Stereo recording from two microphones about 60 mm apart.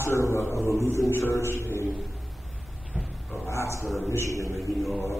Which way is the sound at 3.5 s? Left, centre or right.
Left.